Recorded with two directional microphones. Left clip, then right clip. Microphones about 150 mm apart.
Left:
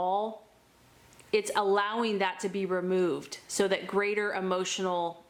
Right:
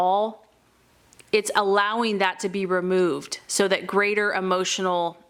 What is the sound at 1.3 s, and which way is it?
A woman's voice, 30° right (ahead or behind).